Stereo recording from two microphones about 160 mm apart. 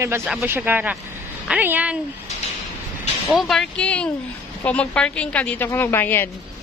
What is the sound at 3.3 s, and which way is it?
A woman's voice, centre (ahead or behind).